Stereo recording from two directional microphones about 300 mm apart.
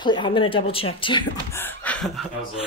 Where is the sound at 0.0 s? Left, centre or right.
Centre.